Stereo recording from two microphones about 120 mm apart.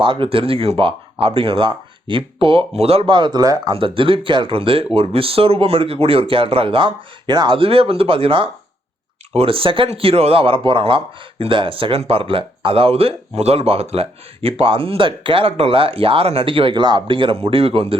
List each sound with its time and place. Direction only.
0.0 s speech: 45° right (ahead or behind)
3.7 s speech: 50° right (ahead or behind)